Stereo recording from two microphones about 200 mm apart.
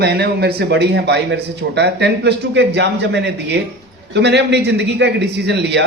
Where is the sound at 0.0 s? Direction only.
55° right (ahead or behind).